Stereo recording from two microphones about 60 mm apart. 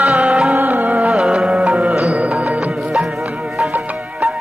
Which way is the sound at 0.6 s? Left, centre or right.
Right.